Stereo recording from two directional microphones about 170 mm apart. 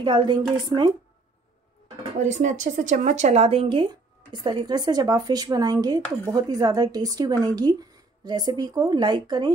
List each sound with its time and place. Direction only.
0.0 s speech: 25° right (ahead or behind)
2.1 s speech: 45° right (ahead or behind); by 9.5 s 25° right (ahead or behind)